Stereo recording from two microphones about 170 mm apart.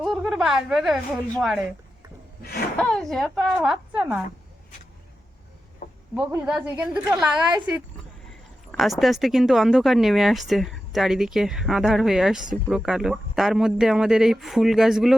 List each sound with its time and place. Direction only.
0.0 s a woman's voice: centre (ahead or behind)
2.4 s speech: 60° left (ahead or behind)
2.7 s speech: 5° left (ahead or behind)
5.8 s a sound: 55° left (ahead or behind)
6.1 s speech: 5° right (ahead or behind)